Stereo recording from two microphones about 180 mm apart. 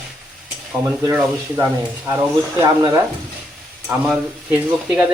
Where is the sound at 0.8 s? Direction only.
15° right (ahead or behind).